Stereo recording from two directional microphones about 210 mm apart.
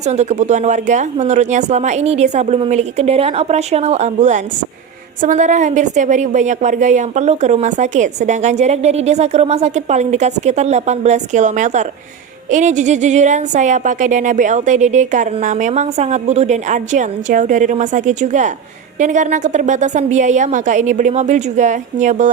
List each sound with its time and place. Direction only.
0.0 s a woman's voice: 30° right (ahead or behind)